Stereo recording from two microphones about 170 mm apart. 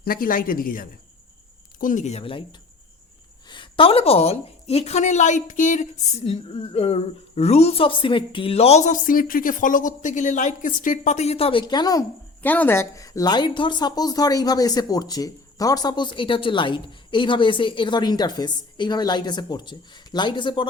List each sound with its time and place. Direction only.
0.0 s a woman's voice: 55° left (ahead or behind); by 2.4 s 35° left (ahead or behind)
3.5 s a woman's voice: 30° left (ahead or behind)
11.6 s speech: 25° left (ahead or behind)
12.4 s speech: 10° left (ahead or behind); by 20.7 s 25° left (ahead or behind)